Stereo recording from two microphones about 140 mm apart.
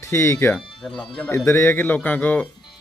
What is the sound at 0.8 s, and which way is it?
Speech, 5° left (ahead or behind).